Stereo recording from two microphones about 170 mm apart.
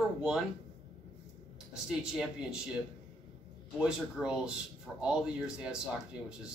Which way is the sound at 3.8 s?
5° right (ahead or behind).